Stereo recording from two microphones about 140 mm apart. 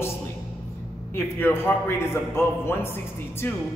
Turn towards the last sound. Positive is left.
turn(degrees=20)  # may be behind; listen again after turning